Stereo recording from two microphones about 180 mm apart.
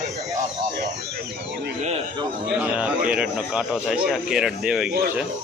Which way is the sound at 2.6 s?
5° right (ahead or behind).